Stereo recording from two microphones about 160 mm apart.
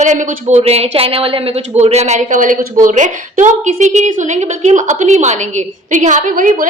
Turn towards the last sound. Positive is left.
turn(degrees=-60)  # may be behind; listen again after turning